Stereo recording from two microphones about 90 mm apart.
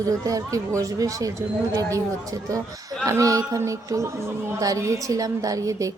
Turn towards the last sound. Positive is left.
turn(degrees=-40)  # may be behind; listen again after turning